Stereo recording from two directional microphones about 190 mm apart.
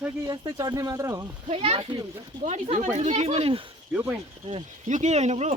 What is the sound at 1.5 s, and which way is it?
Speech, 30° right (ahead or behind).